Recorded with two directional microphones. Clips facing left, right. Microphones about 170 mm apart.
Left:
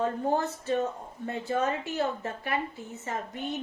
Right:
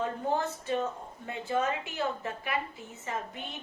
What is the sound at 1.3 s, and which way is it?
A woman's voice, 40° left (ahead or behind).